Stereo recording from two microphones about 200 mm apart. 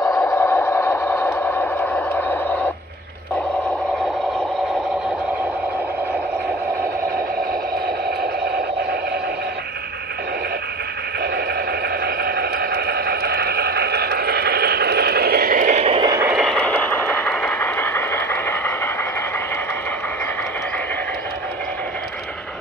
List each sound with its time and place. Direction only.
0.0 s vehicle: 15° left (ahead or behind)
8.2 s radio: 50° right (ahead or behind)
12.0 s a sound: 50° right (ahead or behind); by 16.3 s 20° right (ahead or behind)
16.3 s vehicle: centre (ahead or behind)